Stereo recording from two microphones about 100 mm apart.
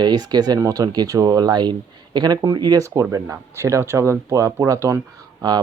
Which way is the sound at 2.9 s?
30° right (ahead or behind).